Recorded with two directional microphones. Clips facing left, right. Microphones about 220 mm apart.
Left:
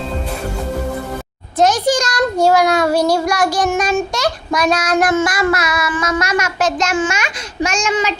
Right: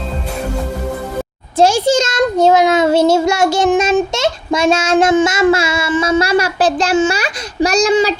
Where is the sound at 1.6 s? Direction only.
30° right (ahead or behind).